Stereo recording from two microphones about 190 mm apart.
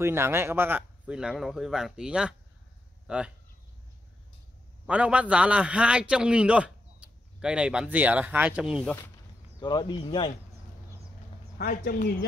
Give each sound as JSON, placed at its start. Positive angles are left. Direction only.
{"t": 0.0, "sound": "a man's voice", "side_deg": -15}
{"t": 4.8, "sound": "a man's voice", "side_deg": -5}
{"t": 9.6, "sound": "speech", "side_deg": 20}
{"t": 11.5, "sound": "speech", "side_deg": 50}